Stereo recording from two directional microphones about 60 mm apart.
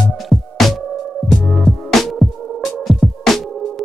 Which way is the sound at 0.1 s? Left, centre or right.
Centre.